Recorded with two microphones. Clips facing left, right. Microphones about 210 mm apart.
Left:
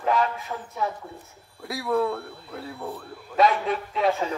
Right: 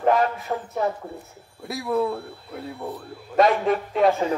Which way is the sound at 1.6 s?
20° right (ahead or behind).